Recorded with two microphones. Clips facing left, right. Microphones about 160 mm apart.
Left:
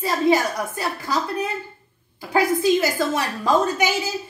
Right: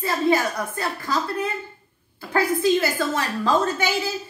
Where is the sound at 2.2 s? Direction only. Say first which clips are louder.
Left 2 dB; 15° left (ahead or behind).